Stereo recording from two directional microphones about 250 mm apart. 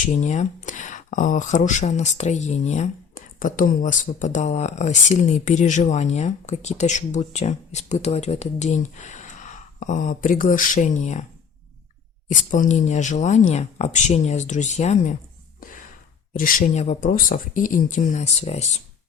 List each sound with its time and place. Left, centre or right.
0.0 s speech: left
12.3 s speech: left
16.3 s speech: left